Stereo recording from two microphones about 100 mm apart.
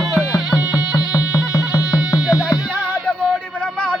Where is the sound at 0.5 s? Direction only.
40° left (ahead or behind).